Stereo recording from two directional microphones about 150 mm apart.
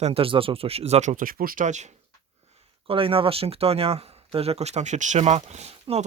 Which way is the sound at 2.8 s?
35° right (ahead or behind).